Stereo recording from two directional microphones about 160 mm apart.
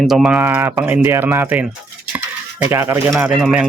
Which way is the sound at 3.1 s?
Centre (ahead or behind).